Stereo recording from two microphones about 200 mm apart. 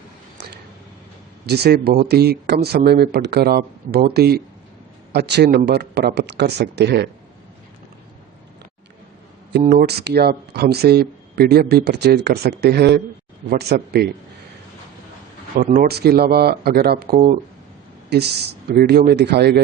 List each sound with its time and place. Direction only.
1.5 s speech: 55° right (ahead or behind)
9.5 s speech: 50° right (ahead or behind)
15.5 s speech: 45° right (ahead or behind)
18.7 s speech: 55° right (ahead or behind)